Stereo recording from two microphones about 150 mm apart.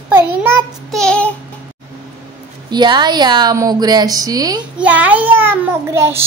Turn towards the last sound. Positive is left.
turn(degrees=-15)  # may be behind; listen again after turning